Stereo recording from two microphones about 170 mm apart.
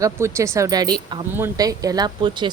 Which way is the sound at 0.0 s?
15° right (ahead or behind).